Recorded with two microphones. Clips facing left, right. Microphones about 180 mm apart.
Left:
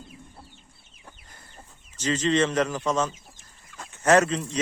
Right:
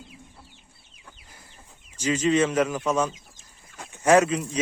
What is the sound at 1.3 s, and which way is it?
Chicken, 10° right (ahead or behind).